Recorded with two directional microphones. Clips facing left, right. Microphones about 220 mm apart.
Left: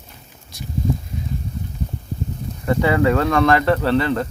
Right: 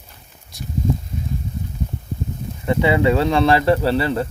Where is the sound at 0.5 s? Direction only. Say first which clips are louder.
Right 1 dB; centre (ahead or behind).